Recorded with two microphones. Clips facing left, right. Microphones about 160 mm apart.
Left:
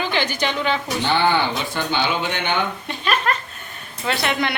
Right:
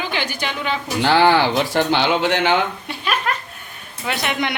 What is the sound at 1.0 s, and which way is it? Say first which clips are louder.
Speech: right 5 dB; 90° right.